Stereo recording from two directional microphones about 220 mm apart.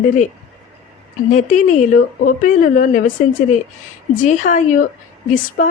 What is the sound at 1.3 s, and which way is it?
Speech, 35° left (ahead or behind).